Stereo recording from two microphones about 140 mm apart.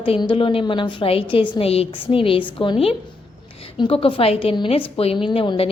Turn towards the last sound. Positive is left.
turn(degrees=40)  # may be behind; listen again after turning